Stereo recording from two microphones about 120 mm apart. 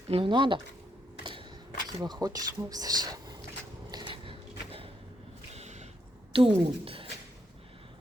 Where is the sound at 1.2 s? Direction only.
45° right (ahead or behind).